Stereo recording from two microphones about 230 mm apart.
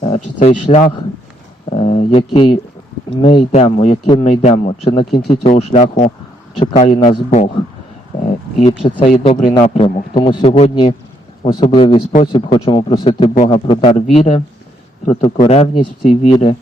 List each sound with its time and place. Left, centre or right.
0.0 s speech: left